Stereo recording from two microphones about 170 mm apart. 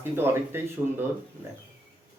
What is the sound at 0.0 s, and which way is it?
Speech, 15° right (ahead or behind).